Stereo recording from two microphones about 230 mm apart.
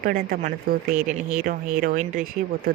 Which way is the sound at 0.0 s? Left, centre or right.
Right.